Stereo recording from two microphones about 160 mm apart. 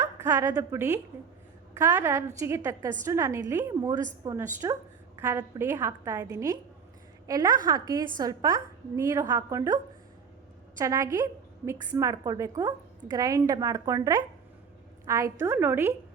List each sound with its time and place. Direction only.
0.0 s a woman's voice: 15° right (ahead or behind)
10.8 s a woman's voice: 20° right (ahead or behind)